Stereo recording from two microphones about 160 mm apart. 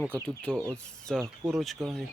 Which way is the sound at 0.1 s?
5° left (ahead or behind).